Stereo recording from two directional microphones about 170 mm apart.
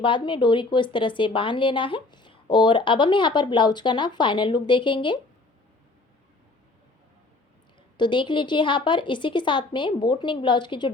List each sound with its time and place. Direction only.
0.0 s speech: 30° left (ahead or behind)
7.9 s speech: 25° left (ahead or behind)